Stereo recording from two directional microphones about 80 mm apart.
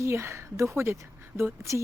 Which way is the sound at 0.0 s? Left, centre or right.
Right.